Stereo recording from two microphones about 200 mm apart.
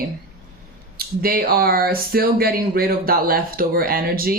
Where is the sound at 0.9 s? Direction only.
50° right (ahead or behind).